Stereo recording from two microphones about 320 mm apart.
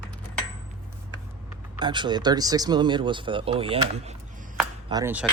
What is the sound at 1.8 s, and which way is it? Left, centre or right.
Speech, centre.